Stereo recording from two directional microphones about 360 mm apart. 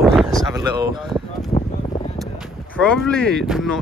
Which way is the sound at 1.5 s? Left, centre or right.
Centre.